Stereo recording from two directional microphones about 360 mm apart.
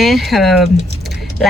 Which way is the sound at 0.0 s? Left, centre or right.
Centre.